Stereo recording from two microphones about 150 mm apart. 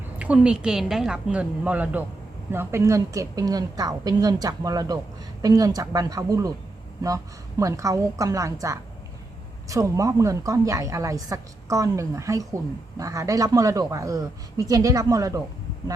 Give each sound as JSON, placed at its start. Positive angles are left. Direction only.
{"t": 0.2, "sound": "a woman's voice", "side_deg": -5}
{"t": 7.6, "sound": "a woman's voice", "side_deg": -20}